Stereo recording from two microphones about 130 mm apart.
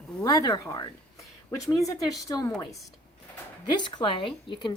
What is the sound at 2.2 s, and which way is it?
Speech, 30° left (ahead or behind).